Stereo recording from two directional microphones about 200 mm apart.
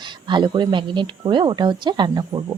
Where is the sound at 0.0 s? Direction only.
25° right (ahead or behind).